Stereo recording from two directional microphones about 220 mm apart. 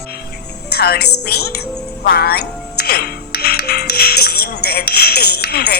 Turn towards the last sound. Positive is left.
turn(degrees=45)  # may be behind; listen again after turning